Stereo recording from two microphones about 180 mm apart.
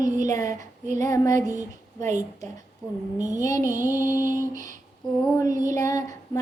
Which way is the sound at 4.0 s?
20° left (ahead or behind).